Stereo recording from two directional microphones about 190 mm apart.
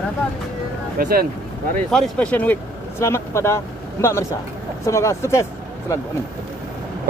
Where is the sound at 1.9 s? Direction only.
5° left (ahead or behind).